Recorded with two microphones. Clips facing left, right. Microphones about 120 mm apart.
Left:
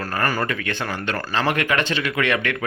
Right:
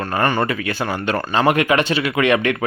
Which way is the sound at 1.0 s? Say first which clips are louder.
Right 6 dB; 15° right (ahead or behind).